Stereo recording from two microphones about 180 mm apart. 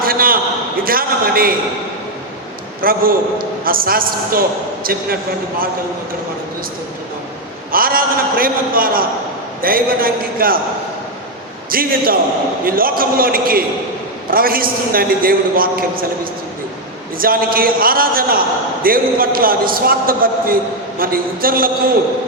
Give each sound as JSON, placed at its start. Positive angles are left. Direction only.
{"t": 0.0, "sound": "a sound", "side_deg": -55}
{"t": 2.8, "sound": "a man's voice", "side_deg": -55}
{"t": 7.7, "sound": "a man's voice", "side_deg": -55}
{"t": 11.7, "sound": "a man's voice", "side_deg": -55}
{"t": 17.2, "sound": "a man's voice", "side_deg": -55}